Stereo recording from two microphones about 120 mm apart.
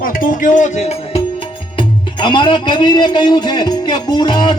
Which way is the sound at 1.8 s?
40° left (ahead or behind).